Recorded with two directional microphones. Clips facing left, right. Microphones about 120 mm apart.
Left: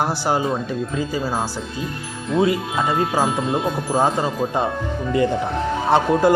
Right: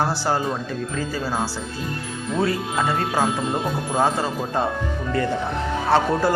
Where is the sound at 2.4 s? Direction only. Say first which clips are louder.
Left 3 dB; 15° left (ahead or behind).